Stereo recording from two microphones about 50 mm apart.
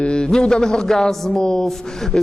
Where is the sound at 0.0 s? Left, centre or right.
Centre.